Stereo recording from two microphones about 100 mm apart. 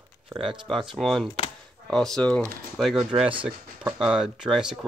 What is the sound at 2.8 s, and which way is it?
Speech, 5° right (ahead or behind).